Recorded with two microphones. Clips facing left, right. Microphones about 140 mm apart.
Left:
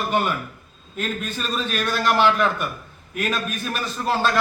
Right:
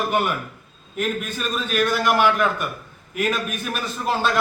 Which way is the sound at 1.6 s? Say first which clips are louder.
Right 3 dB; 10° right (ahead or behind).